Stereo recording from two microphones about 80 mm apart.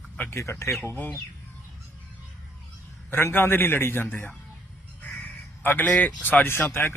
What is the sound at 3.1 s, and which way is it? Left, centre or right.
A man's voice, left.